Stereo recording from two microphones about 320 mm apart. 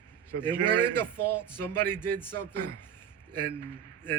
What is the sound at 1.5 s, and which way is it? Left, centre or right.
Speech, centre.